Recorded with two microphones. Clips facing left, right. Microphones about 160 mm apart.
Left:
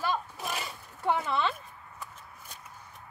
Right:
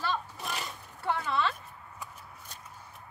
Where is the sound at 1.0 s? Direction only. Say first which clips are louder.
Left 2 dB; 20° left (ahead or behind).